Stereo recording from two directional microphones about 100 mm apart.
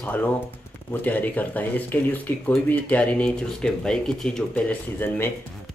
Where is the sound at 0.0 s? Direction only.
15° left (ahead or behind).